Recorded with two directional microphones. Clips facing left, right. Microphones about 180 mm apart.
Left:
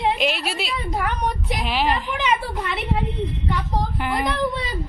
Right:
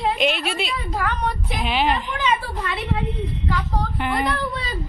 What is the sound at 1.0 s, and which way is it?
Speech, 15° left (ahead or behind).